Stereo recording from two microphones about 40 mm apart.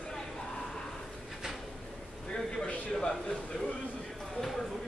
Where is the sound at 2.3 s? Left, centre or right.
Left.